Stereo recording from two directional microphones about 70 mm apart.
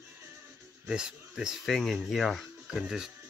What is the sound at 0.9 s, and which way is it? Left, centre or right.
Speech, centre.